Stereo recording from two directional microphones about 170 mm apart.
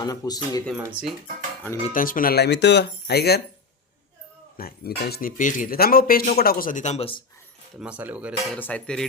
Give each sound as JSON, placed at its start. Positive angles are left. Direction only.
{"t": 0.0, "sound": "speech", "side_deg": 20}
{"t": 0.8, "sound": "speech", "side_deg": -5}
{"t": 1.9, "sound": "speech", "side_deg": 55}
{"t": 4.5, "sound": "speech", "side_deg": 60}
{"t": 7.8, "sound": "speech", "side_deg": -5}
{"t": 8.5, "sound": "speech", "side_deg": 10}